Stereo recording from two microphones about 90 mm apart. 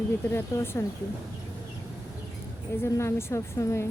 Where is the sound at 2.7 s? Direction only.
30° left (ahead or behind).